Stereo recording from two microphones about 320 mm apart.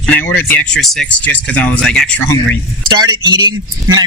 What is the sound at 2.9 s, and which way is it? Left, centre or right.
Speech, centre.